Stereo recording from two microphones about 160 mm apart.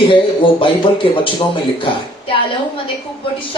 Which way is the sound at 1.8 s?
35° left (ahead or behind).